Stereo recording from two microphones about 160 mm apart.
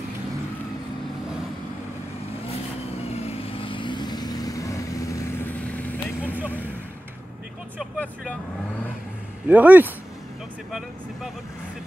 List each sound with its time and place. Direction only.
3.2 s vehicle: 40° left (ahead or behind); by 6.3 s 10° left (ahead or behind)
9.5 s speech: 10° right (ahead or behind)